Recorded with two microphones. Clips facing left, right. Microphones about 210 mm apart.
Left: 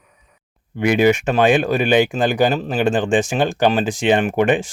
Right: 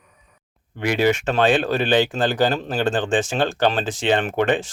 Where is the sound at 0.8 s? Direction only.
15° left (ahead or behind).